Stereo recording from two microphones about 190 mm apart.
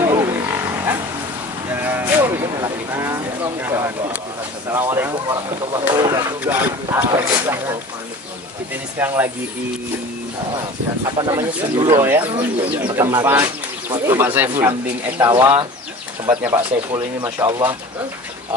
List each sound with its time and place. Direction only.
0.1 s wild animals: 15° right (ahead or behind)
1.7 s music: 10° right (ahead or behind)
2.4 s a sound: 15° right (ahead or behind)
4.6 s speech: 15° right (ahead or behind)
7.2 s wild animals: 15° right (ahead or behind)
9.0 s speech: 10° right (ahead or behind)
11.1 s speech: 20° right (ahead or behind)
12.0 s speech: 10° right (ahead or behind)
12.4 s speech: 25° right (ahead or behind)
12.9 s speech: 15° right (ahead or behind)